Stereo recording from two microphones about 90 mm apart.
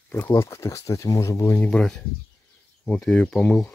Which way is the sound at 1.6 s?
10° left (ahead or behind).